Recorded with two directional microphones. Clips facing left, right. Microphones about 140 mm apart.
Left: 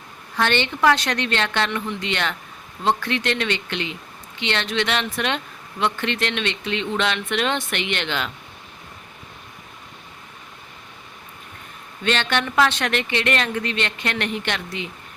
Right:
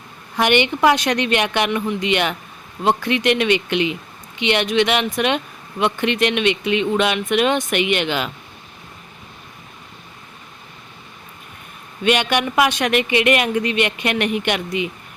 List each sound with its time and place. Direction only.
0.3 s a woman's voice: 15° right (ahead or behind)
12.0 s a woman's voice: 15° right (ahead or behind)